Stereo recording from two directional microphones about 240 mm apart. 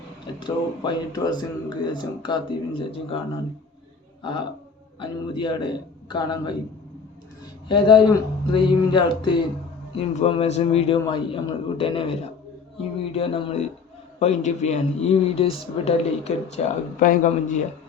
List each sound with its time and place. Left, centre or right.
0.3 s speech: centre
4.2 s a man's voice: centre
7.7 s a man's voice: centre